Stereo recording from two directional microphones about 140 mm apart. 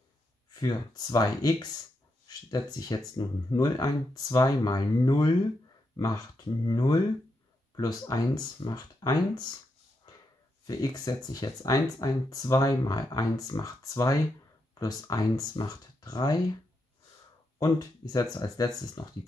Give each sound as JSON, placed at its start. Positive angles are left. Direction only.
{"t": 0.6, "sound": "speech", "side_deg": 30}
{"t": 10.7, "sound": "speech", "side_deg": 25}
{"t": 17.6, "sound": "speech", "side_deg": 25}